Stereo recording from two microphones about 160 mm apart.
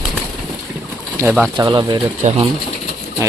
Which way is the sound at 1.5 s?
30° right (ahead or behind).